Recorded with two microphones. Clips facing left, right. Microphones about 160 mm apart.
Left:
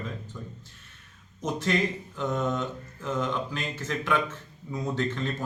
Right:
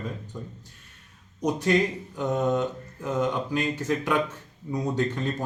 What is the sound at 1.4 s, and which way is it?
Speech, 15° right (ahead or behind).